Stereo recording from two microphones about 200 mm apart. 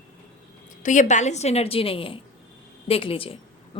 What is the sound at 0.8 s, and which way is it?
A woman's voice, 40° left (ahead or behind).